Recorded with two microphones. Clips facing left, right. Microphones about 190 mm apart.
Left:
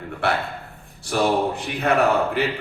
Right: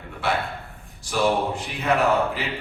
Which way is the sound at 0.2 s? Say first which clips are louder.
Left 2 dB; 60° left (ahead or behind).